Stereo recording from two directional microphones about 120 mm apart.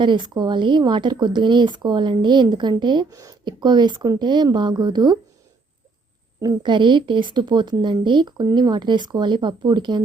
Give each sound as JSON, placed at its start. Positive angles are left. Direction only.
{"t": 0.0, "sound": "speech", "side_deg": -40}
{"t": 6.4, "sound": "speech", "side_deg": -35}